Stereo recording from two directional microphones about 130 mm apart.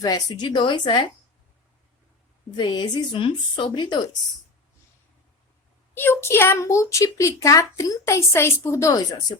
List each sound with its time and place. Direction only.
0.0 s a woman's voice: 30° left (ahead or behind)
2.6 s a woman's voice: 35° left (ahead or behind)
5.9 s a woman's voice: 15° left (ahead or behind)